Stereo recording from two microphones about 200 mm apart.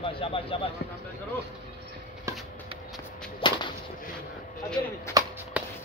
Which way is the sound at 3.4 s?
25° left (ahead or behind).